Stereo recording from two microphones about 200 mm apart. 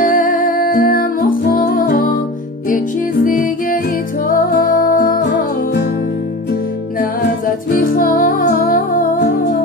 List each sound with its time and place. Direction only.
0.0 s music: 40° left (ahead or behind)
3.3 s music: 45° left (ahead or behind)
7.7 s music: 45° left (ahead or behind)